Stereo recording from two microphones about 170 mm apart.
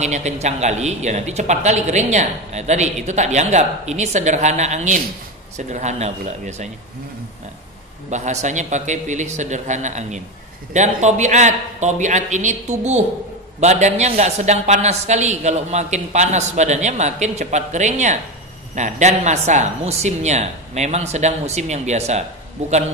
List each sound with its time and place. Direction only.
0.0 s a man's voice: 40° right (ahead or behind)
8.1 s a man's voice: 45° right (ahead or behind)